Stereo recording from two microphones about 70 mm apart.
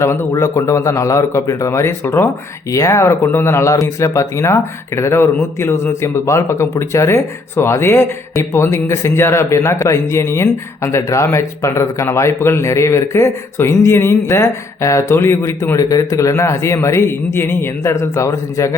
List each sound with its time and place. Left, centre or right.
0.0 s speech: left
0.3 s a man's voice: left
2.7 s a man's voice: left